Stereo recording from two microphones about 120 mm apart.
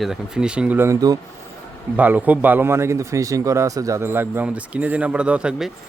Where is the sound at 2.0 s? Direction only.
15° right (ahead or behind).